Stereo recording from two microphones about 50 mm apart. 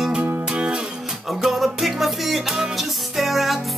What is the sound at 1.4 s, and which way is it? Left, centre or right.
Music, centre.